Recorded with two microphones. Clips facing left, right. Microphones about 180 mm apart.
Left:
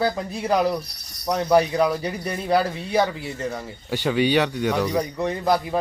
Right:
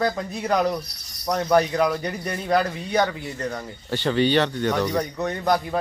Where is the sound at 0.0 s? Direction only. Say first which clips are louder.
Left 1 dB; 10° left (ahead or behind).